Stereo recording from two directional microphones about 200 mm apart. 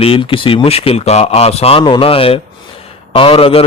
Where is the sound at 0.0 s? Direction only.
25° left (ahead or behind).